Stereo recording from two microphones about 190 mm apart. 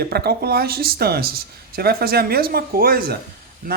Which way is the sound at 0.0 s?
55° right (ahead or behind).